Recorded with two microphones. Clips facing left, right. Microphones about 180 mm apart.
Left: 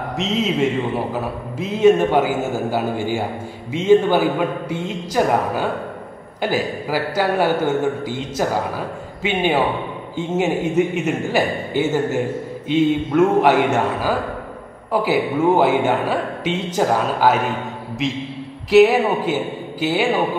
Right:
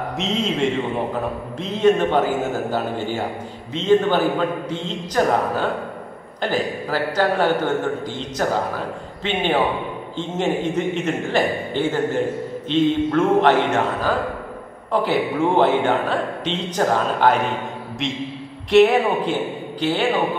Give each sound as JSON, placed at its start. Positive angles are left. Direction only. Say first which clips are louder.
{"t": 0.2, "sound": "a man's voice", "louder": "left 2 dB", "side_deg": 0}